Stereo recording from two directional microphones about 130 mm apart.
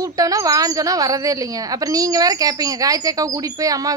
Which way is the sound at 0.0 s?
25° right (ahead or behind).